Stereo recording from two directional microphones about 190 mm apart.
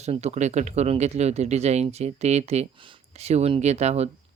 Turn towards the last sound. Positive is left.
turn(degrees=-35)  # may be behind; listen again after turning